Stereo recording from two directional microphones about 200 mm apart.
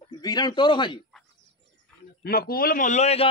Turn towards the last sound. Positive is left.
turn(degrees=35)  # may be behind; listen again after turning